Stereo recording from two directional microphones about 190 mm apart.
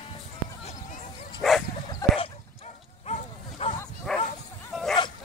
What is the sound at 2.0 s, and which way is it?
Bow-wow, 20° left (ahead or behind).